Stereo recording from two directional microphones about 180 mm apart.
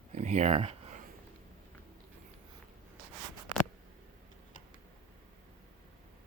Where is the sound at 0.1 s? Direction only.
40° right (ahead or behind).